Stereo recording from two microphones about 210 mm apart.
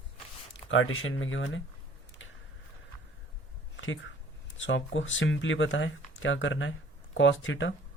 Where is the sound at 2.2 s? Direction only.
65° left (ahead or behind).